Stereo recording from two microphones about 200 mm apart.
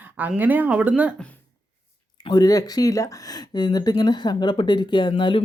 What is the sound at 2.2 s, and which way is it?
Speech, 20° left (ahead or behind).